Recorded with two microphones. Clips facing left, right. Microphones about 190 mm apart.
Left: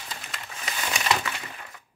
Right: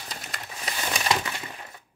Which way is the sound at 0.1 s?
40° right (ahead or behind).